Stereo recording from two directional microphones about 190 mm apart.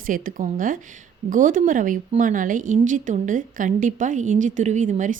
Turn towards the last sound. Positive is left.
turn(degrees=-40)  # may be behind; listen again after turning